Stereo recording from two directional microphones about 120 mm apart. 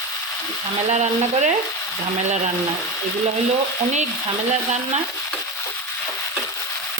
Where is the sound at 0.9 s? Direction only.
75° right (ahead or behind).